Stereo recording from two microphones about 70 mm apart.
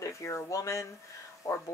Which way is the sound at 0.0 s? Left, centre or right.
Left.